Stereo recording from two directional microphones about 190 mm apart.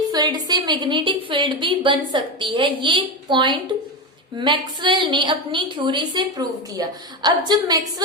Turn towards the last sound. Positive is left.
turn(degrees=-20)  # may be behind; listen again after turning